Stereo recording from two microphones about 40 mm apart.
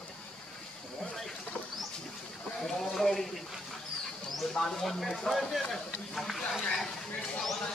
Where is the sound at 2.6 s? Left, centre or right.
Centre.